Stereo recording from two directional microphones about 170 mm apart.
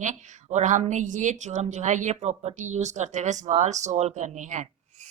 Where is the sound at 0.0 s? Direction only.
45° right (ahead or behind).